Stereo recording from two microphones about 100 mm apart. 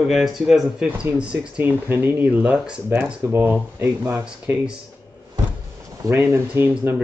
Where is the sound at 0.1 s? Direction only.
Centre (ahead or behind).